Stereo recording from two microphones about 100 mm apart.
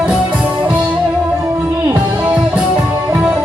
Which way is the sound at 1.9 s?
15° right (ahead or behind).